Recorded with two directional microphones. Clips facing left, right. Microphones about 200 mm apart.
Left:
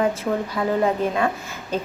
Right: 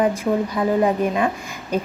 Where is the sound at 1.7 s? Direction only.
15° right (ahead or behind).